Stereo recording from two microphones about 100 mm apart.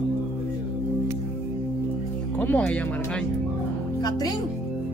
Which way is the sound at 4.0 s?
40° left (ahead or behind).